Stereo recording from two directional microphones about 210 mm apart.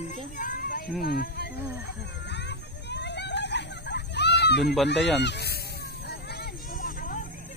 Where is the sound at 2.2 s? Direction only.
55° left (ahead or behind).